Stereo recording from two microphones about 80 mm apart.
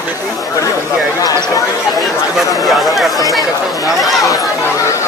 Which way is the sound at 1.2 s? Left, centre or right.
Left.